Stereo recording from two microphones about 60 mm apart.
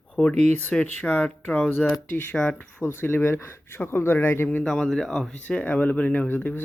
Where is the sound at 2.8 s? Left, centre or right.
Left.